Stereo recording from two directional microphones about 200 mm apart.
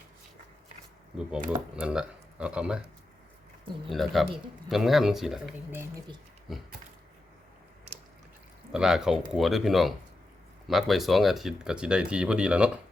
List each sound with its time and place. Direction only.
1.1 s speech: 5° right (ahead or behind)
3.8 s speech: centre (ahead or behind)
8.7 s speech: centre (ahead or behind)